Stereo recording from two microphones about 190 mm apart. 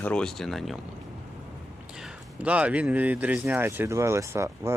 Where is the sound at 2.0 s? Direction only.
5° right (ahead or behind).